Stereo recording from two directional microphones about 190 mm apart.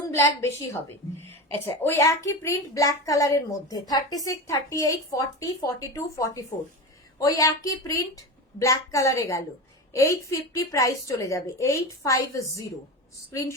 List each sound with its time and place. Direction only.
0.1 s a woman's voice: 15° left (ahead or behind)